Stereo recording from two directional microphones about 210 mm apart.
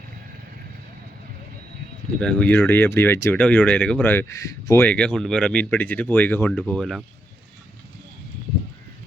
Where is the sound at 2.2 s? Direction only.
5° left (ahead or behind).